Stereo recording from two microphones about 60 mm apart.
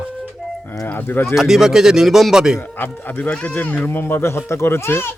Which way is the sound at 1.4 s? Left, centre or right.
Centre.